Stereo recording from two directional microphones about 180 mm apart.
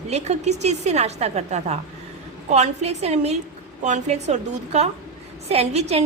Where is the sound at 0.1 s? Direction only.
40° right (ahead or behind).